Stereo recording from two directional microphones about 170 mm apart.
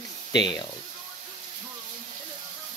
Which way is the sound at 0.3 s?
25° left (ahead or behind).